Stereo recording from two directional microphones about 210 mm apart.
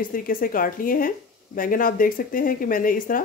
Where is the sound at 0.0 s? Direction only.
40° left (ahead or behind).